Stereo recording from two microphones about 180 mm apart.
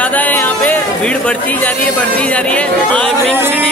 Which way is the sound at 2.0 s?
5° left (ahead or behind).